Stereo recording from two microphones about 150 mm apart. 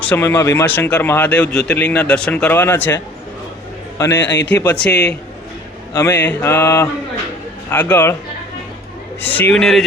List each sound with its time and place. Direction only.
0.1 s speech: 15° left (ahead or behind)
4.9 s a man's voice: 90° left
5.9 s speech: 20° left (ahead or behind)
9.2 s speech: 10° left (ahead or behind)